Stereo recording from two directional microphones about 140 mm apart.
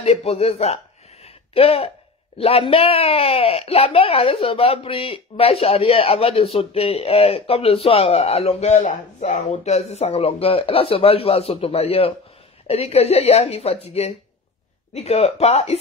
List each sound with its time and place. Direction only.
0.0 s speech: 45° left (ahead or behind)
1.2 s a sound: 45° left (ahead or behind)
2.3 s speech: 45° left (ahead or behind)